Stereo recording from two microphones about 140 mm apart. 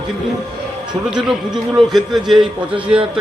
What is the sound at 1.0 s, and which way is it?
A man's voice, 5° right (ahead or behind).